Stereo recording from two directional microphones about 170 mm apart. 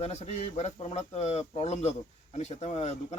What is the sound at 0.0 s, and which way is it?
Speech, 40° left (ahead or behind).